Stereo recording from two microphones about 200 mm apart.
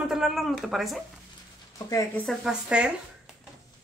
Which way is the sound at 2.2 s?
Centre (ahead or behind).